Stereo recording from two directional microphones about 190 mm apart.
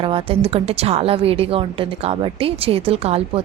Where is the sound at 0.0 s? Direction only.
30° right (ahead or behind).